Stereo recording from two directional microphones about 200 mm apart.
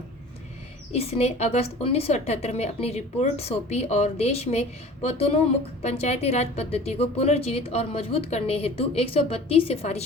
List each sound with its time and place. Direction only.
0.9 s a woman's voice: 30° left (ahead or behind)